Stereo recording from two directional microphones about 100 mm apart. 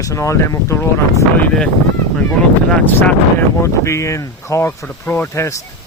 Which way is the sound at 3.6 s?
30° left (ahead or behind).